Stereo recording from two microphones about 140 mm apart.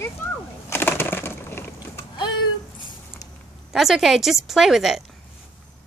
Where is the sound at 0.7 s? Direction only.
15° left (ahead or behind).